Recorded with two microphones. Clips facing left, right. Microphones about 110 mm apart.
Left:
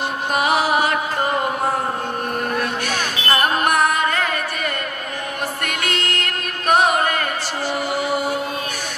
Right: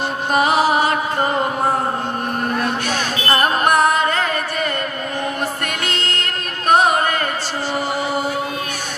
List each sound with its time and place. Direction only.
0.3 s music: 30° right (ahead or behind)
2.9 s music: 35° right (ahead or behind)
5.7 s music: 30° right (ahead or behind)